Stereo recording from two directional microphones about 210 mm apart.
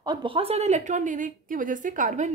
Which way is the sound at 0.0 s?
20° right (ahead or behind).